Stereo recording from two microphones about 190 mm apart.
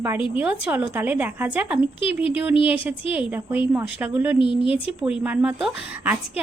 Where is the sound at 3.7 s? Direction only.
10° right (ahead or behind).